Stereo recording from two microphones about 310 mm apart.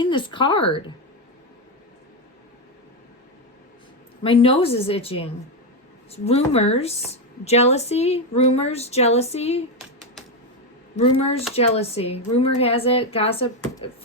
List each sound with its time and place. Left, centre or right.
0.0 s speech: centre
4.2 s a woman's voice: centre
10.9 s a woman's voice: centre